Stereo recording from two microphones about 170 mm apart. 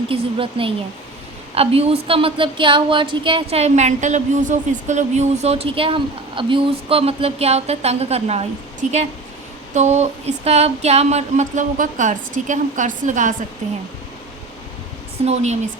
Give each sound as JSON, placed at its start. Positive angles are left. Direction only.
{"t": 0.1, "sound": "a woman's voice", "side_deg": -30}
{"t": 9.7, "sound": "a sound", "side_deg": -40}
{"t": 15.2, "sound": "a woman's voice", "side_deg": -40}